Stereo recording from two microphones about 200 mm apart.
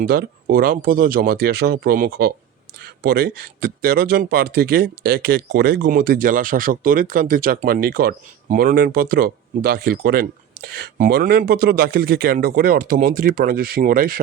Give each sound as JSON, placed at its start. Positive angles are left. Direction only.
{"t": 0.0, "sound": "speech", "side_deg": -50}